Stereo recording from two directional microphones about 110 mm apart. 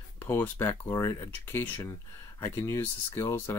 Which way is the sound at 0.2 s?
20° left (ahead or behind).